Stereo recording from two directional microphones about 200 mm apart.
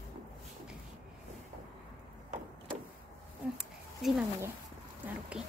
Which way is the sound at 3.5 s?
5° right (ahead or behind).